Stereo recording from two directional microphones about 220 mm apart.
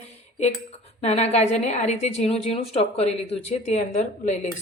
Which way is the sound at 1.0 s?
30° left (ahead or behind).